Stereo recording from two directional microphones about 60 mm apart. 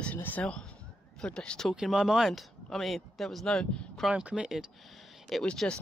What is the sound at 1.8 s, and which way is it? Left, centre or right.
Speech, centre.